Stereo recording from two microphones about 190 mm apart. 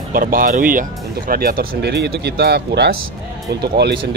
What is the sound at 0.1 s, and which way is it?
Speech, 50° right (ahead or behind).